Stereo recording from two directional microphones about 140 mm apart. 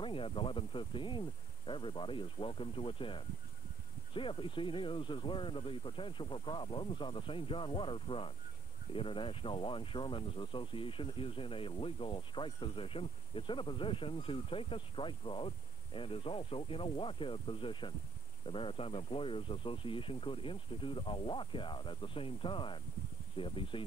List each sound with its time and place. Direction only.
0.0 s speech: 40° left (ahead or behind)